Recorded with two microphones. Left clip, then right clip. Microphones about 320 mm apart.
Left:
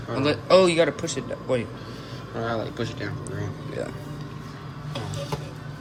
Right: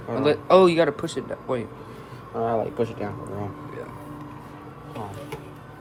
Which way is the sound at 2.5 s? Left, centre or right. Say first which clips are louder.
Right 4 dB; right.